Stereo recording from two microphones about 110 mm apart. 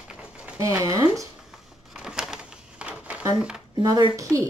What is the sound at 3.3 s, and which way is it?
Speech, 5° right (ahead or behind).